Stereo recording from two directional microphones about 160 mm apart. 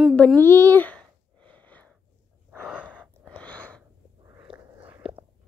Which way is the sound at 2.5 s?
5° right (ahead or behind).